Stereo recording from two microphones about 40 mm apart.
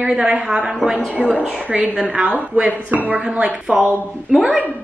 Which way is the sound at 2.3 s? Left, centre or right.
Right.